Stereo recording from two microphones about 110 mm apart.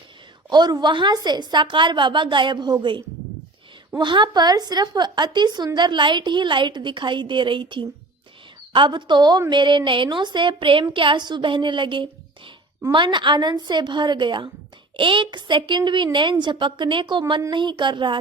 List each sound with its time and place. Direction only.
0.5 s speech: 40° right (ahead or behind)
3.9 s speech: 45° right (ahead or behind)